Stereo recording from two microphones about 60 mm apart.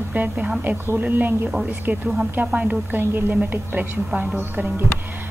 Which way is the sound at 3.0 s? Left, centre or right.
Right.